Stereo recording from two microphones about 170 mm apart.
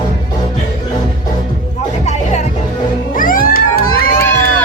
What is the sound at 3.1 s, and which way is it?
Music, 55° left (ahead or behind).